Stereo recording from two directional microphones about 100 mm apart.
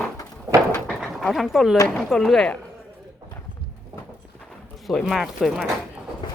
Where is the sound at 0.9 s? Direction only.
Centre (ahead or behind).